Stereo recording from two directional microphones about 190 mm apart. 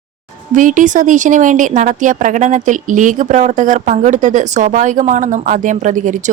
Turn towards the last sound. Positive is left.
turn(degrees=-40)  # may be behind; listen again after turning